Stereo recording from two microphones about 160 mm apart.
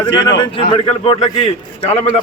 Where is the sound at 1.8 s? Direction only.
40° left (ahead or behind).